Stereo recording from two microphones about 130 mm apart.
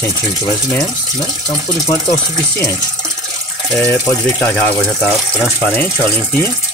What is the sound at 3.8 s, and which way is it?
Speech, 15° left (ahead or behind).